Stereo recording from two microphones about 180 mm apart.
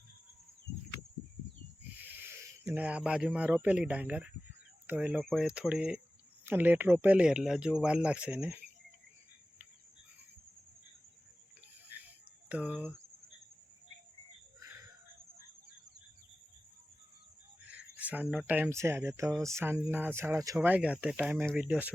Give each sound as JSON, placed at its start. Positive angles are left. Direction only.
{"t": 2.0, "sound": "speech", "side_deg": -15}
{"t": 12.5, "sound": "speech", "side_deg": -5}
{"t": 17.7, "sound": "speech", "side_deg": -5}